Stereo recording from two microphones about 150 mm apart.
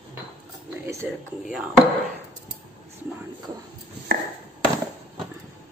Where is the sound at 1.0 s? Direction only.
10° right (ahead or behind).